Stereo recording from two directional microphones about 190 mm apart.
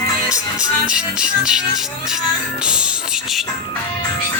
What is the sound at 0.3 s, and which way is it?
Music, 5° right (ahead or behind).